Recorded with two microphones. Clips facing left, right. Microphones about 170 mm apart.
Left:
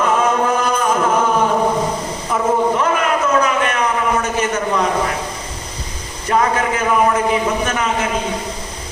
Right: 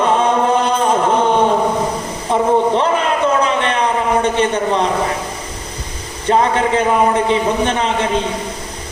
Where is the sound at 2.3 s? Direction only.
30° right (ahead or behind).